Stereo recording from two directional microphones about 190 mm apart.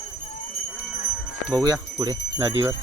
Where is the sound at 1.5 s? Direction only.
20° right (ahead or behind).